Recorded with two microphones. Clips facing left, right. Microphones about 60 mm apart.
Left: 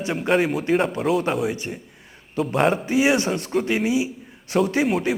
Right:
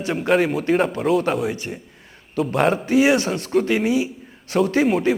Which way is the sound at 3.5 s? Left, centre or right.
Centre.